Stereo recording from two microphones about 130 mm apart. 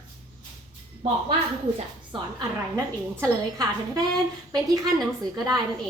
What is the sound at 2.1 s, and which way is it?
A woman's voice, 30° right (ahead or behind).